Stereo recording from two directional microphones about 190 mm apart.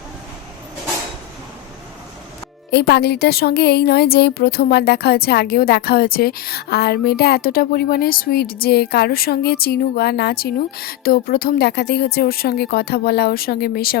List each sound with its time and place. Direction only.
2.6 s speech: 60° left (ahead or behind)